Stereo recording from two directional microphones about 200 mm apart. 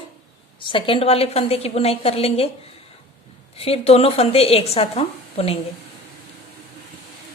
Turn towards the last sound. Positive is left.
turn(degrees=30)  # may be behind; listen again after turning